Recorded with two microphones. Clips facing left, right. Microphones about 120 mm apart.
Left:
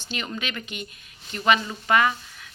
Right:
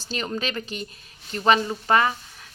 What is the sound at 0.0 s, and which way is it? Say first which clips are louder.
A woman's voice: right 3 dB; 35° right (ahead or behind).